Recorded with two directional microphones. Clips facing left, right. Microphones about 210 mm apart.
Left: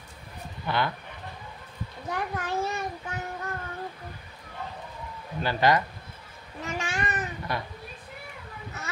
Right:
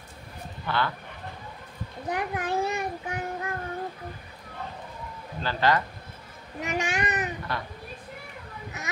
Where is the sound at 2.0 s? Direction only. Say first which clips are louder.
Right 2 dB; 15° right (ahead or behind).